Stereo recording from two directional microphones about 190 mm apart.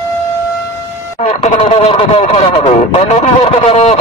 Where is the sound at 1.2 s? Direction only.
35° left (ahead or behind).